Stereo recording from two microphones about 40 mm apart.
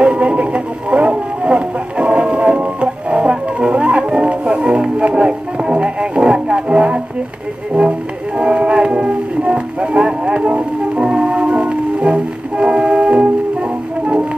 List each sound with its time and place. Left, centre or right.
0.0 s music: right
8.4 s music: right